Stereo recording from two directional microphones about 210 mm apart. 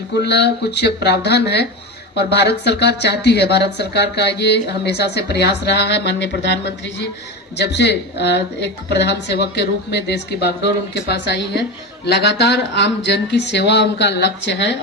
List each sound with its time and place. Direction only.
0.2 s speech: 50° left (ahead or behind)
10.9 s speech: 55° left (ahead or behind)